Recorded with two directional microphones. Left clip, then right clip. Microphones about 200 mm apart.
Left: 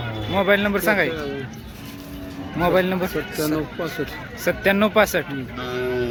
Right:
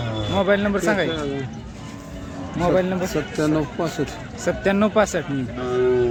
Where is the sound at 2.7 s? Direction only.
10° left (ahead or behind).